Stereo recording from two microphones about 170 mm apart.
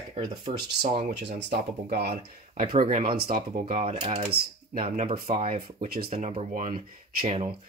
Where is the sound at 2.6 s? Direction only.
45° right (ahead or behind).